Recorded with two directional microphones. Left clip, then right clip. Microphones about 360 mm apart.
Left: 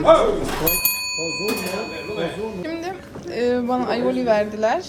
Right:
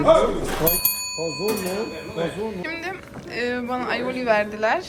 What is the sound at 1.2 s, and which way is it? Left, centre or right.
Fire alarm, right.